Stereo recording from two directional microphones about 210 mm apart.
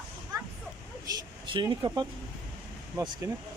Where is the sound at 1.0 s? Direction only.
20° right (ahead or behind).